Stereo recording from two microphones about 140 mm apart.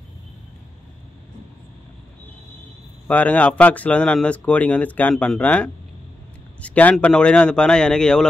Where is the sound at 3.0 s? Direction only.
10° left (ahead or behind).